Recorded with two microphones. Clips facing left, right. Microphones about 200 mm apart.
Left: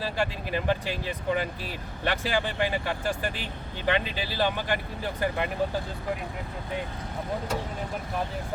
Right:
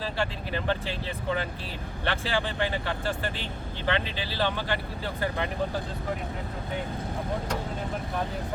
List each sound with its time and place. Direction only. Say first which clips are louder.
0.0 s speech: left 1 dB; 10° left (ahead or behind)